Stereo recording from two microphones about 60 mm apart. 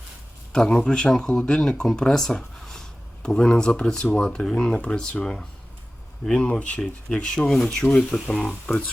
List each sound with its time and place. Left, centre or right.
0.5 s speech: centre
7.4 s speech: centre